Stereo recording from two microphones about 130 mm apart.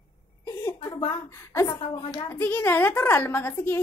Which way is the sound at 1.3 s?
20° left (ahead or behind).